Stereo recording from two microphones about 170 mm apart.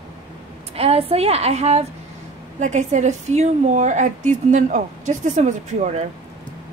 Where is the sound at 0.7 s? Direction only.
35° right (ahead or behind).